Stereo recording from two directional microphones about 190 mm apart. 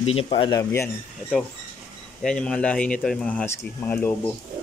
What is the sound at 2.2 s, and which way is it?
Speech, 5° left (ahead or behind).